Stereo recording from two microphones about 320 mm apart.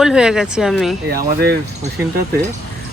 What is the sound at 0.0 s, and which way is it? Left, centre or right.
Speech, centre.